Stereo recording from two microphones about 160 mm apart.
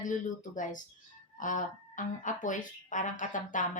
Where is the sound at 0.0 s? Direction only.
55° left (ahead or behind).